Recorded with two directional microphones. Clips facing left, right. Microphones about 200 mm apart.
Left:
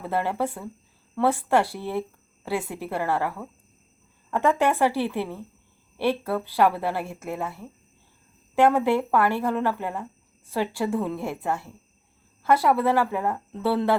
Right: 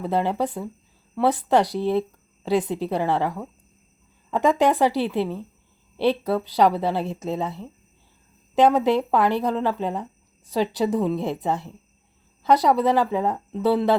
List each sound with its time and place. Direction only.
0.0 s speech: 15° right (ahead or behind)